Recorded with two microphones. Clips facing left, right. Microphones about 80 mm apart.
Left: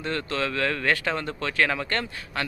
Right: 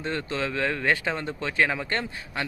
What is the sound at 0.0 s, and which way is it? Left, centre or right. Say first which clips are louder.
Speech: left 1 dB; centre.